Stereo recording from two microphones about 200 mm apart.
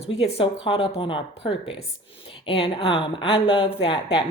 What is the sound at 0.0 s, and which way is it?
Speech, 30° left (ahead or behind).